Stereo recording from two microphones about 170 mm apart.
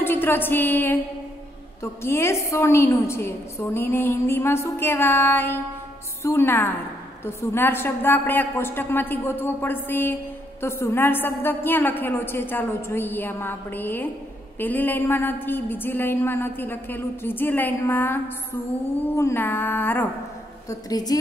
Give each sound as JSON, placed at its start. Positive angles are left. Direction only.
{"t": 0.0, "sound": "a sound", "side_deg": 10}
{"t": 1.8, "sound": "a woman's voice", "side_deg": 15}
{"t": 20.9, "sound": "a woman's voice", "side_deg": 25}